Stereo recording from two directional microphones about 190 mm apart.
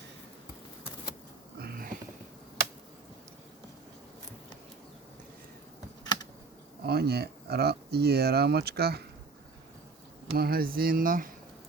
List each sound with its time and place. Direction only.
1.5 s a sound: 55° right (ahead or behind)
6.8 s speech: 55° right (ahead or behind)
10.3 s speech: 55° right (ahead or behind)